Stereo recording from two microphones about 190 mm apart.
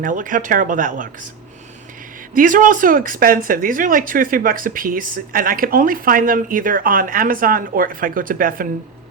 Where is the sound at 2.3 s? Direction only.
45° right (ahead or behind).